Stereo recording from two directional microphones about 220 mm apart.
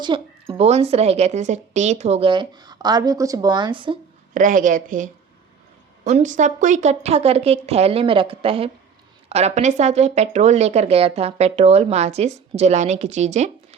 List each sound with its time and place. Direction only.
0.0 s speech: 20° right (ahead or behind)
4.4 s a woman's voice: 35° right (ahead or behind)